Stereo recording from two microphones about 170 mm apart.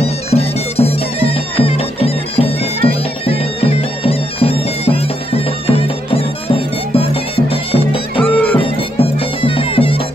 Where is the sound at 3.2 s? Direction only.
35° left (ahead or behind).